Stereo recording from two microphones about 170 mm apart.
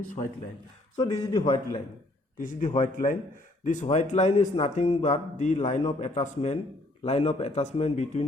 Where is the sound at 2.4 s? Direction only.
50° left (ahead or behind).